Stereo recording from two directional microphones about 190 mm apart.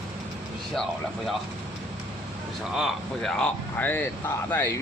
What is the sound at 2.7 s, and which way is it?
Speech, centre (ahead or behind).